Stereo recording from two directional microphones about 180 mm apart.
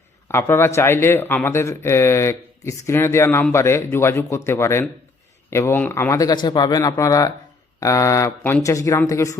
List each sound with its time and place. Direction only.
0.3 s speech: 15° left (ahead or behind)